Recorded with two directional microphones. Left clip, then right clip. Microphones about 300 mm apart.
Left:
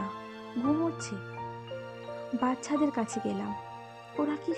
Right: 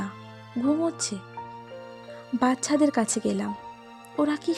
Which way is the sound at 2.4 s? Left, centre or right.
Right.